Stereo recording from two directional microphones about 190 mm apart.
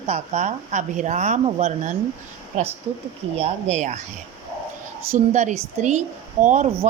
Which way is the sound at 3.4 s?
35° right (ahead or behind).